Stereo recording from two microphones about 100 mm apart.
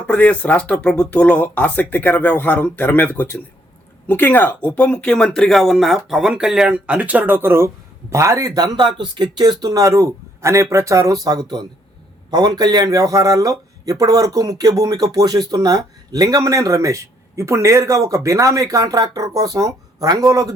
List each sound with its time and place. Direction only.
0.1 s speech: 15° left (ahead or behind); by 20.5 s 35° right (ahead or behind)